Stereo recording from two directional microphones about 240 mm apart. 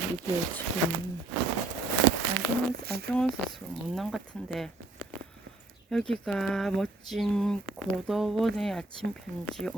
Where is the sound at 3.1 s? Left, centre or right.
Centre.